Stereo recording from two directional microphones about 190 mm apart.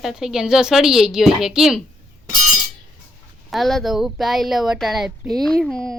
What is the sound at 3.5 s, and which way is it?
Speech, centre (ahead or behind).